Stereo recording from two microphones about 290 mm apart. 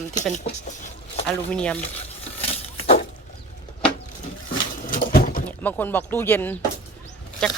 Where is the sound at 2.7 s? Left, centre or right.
Left.